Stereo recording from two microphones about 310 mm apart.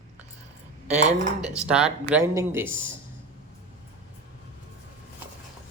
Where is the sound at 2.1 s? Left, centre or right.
Centre.